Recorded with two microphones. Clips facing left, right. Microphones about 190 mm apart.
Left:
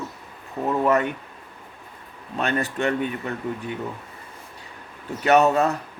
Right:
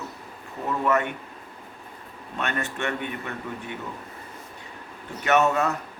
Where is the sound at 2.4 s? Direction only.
35° left (ahead or behind).